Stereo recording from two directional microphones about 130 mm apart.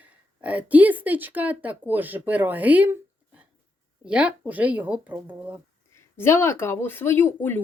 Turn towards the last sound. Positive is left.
turn(degrees=15)  # may be behind; listen again after turning